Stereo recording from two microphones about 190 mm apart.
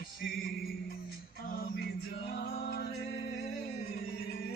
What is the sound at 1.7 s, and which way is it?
Music, 60° left (ahead or behind).